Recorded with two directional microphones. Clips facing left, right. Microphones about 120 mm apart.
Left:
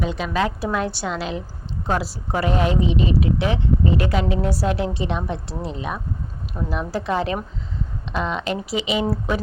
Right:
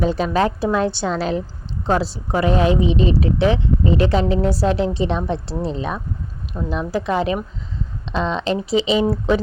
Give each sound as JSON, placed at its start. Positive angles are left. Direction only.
{"t": 0.0, "sound": "a woman's voice", "side_deg": -35}
{"t": 1.9, "sound": "a woman's voice", "side_deg": -25}